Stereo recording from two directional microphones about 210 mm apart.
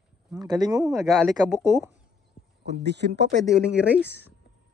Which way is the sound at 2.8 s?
55° right (ahead or behind).